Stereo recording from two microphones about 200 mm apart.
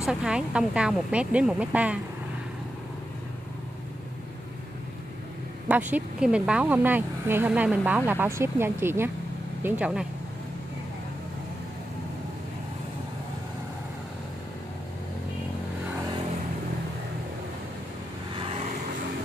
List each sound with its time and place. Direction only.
0.0 s speech: 5° right (ahead or behind)
5.7 s speech: 10° right (ahead or behind)
18.3 s vehicle: 25° right (ahead or behind)